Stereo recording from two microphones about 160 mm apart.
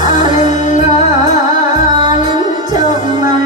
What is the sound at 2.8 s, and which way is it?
Music, 50° left (ahead or behind).